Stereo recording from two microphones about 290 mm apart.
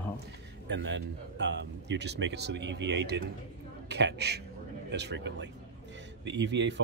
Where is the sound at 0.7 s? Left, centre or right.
Right.